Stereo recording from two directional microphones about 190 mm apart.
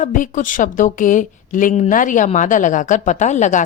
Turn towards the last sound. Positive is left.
turn(degrees=40)  # may be behind; listen again after turning